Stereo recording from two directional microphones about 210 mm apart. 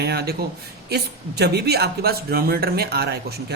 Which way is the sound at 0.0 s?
50° right (ahead or behind).